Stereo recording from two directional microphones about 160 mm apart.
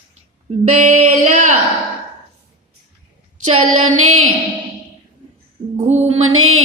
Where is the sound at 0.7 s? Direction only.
45° right (ahead or behind).